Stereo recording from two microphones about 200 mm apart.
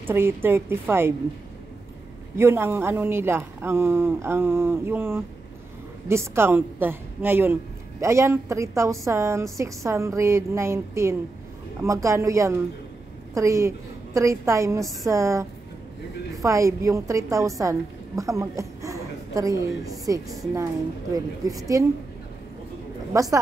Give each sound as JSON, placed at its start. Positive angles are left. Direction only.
{"t": 0.0, "sound": "a woman's voice", "side_deg": -10}
{"t": 2.3, "sound": "a woman's voice", "side_deg": -10}
{"t": 23.1, "sound": "a woman's voice", "side_deg": -15}